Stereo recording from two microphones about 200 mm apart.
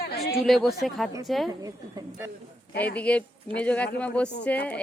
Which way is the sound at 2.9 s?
5° left (ahead or behind).